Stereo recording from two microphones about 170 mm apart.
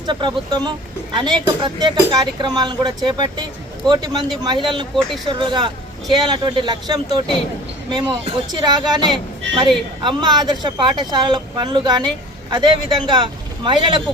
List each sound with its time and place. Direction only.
0.0 s speech: 25° right (ahead or behind)